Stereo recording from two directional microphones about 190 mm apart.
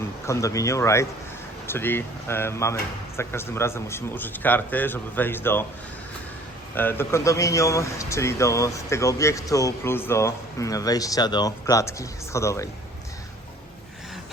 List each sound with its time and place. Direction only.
0.0 s speech: 15° left (ahead or behind)
6.7 s speech: 10° left (ahead or behind)